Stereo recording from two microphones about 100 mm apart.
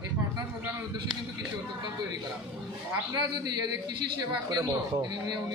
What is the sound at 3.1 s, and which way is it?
A man's voice, 45° right (ahead or behind).